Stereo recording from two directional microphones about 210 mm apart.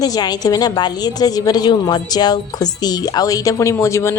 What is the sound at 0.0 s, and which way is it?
A woman's voice, 20° left (ahead or behind).